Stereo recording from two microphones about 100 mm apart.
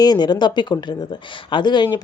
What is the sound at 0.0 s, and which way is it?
Speech, 45° left (ahead or behind).